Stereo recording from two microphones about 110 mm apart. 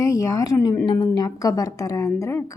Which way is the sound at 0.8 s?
45° left (ahead or behind).